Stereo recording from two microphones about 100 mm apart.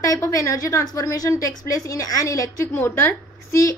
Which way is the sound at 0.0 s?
35° left (ahead or behind).